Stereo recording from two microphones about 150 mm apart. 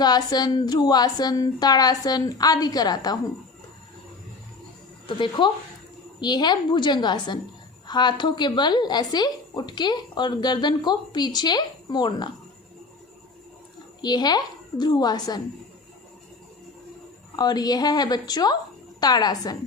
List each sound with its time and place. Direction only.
0.0 s a woman's voice: 25° left (ahead or behind)
5.0 s a woman's voice: 35° left (ahead or behind)
14.0 s a woman's voice: 30° left (ahead or behind)
17.3 s a woman's voice: 25° left (ahead or behind)